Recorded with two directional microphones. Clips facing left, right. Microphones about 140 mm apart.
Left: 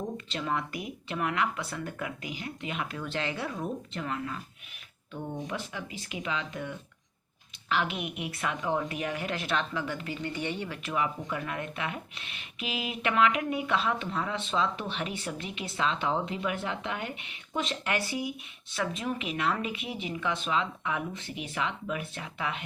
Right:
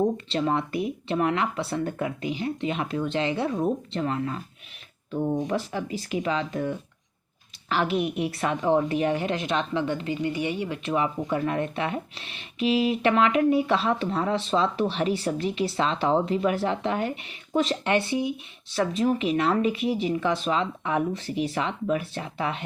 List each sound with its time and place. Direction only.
0.3 s speech: 30° right (ahead or behind)
5.5 s speech: 35° right (ahead or behind); by 10.8 s 15° right (ahead or behind)
10.8 s speech: 30° right (ahead or behind)
18.8 s speech: 35° right (ahead or behind)